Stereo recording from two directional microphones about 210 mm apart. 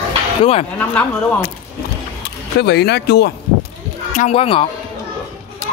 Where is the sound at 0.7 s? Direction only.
10° left (ahead or behind).